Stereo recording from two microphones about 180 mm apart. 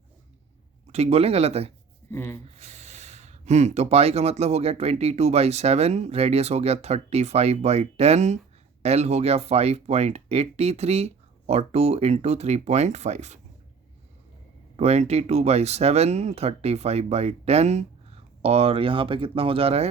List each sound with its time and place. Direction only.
0.9 s speech: 35° right (ahead or behind)
2.0 s speech: 15° left (ahead or behind)
2.6 s speech: 40° right (ahead or behind)
14.8 s speech: 35° right (ahead or behind)